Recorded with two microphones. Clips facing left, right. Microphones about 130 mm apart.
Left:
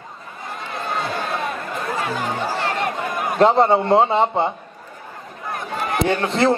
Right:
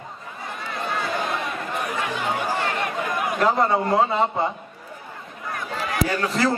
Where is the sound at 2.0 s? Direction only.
40° left (ahead or behind).